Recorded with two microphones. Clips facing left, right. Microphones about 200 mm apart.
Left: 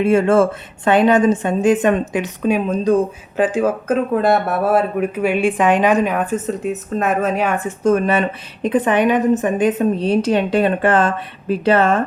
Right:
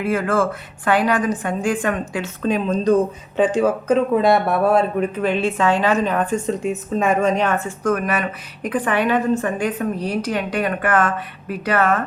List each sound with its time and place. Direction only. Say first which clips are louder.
0.0 s a woman's voice: left 6 dB; 25° left (ahead or behind)
7.9 s speech: left 5 dB; 25° left (ahead or behind)